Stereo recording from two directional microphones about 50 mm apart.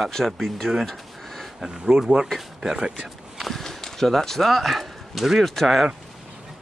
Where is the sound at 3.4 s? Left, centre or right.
Centre.